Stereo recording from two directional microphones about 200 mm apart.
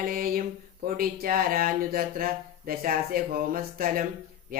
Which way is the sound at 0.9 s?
45° right (ahead or behind).